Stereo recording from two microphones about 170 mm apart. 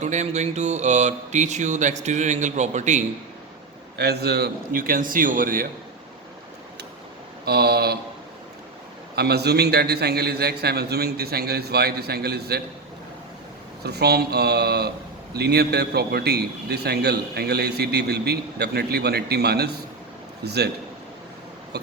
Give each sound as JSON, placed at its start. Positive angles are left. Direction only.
{"t": 0.0, "sound": "speech", "side_deg": -45}
{"t": 3.9, "sound": "a man's voice", "side_deg": -75}
{"t": 7.4, "sound": "a man's voice", "side_deg": -70}
{"t": 9.1, "sound": "a man's voice", "side_deg": -70}
{"t": 13.8, "sound": "a man's voice", "side_deg": -70}